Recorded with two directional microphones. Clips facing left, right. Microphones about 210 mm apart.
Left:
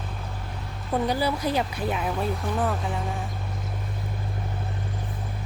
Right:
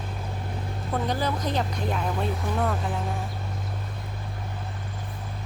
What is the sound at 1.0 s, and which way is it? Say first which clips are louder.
Speech: left 2 dB; 10° left (ahead or behind).